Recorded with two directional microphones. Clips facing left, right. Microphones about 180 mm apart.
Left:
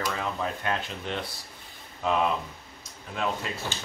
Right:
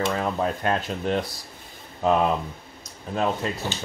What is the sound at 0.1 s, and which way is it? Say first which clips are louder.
Speech: right 6 dB; 40° right (ahead or behind).